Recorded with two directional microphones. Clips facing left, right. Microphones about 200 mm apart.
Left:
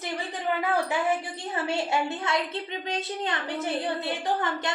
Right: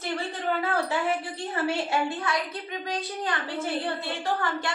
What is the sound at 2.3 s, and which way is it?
A woman's voice, 25° left (ahead or behind).